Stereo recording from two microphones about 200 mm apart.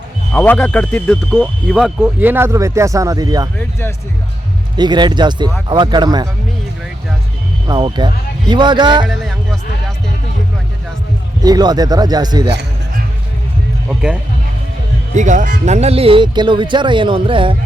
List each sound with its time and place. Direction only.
0.3 s speech: 5° left (ahead or behind); by 3.5 s 20° right (ahead or behind)
3.6 s speech: 10° left (ahead or behind)
4.8 s speech: 20° right (ahead or behind)
7.7 s speech: 25° right (ahead or behind)
11.4 s speech: 20° right (ahead or behind)
15.1 s speech: 40° right (ahead or behind)